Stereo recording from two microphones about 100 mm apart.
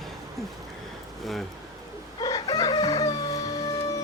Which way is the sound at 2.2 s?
40° left (ahead or behind).